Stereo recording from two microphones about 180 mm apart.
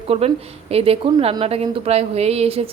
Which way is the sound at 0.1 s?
35° right (ahead or behind).